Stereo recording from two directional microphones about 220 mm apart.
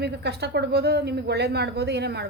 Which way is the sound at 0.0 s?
50° right (ahead or behind).